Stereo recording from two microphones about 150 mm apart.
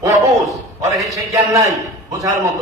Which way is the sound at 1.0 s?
20° right (ahead or behind).